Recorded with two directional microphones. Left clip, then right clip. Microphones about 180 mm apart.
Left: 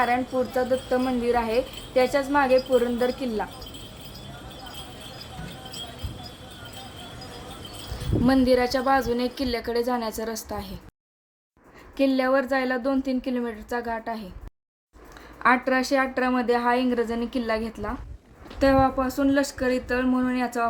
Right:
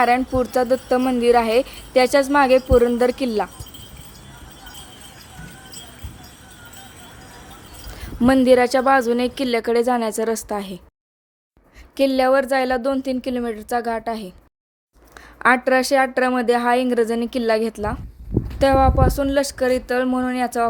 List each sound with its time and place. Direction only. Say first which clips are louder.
0.0 s a woman's voice: right 6 dB; 55° right (ahead or behind)
8.2 s a woman's voice: right 7 dB; 50° right (ahead or behind)
11.9 s a woman's voice: right 6 dB; 45° right (ahead or behind)
15.4 s a woman's voice: right 5 dB; 50° right (ahead or behind)